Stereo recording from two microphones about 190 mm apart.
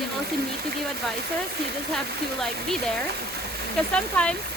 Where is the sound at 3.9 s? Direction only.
5° left (ahead or behind).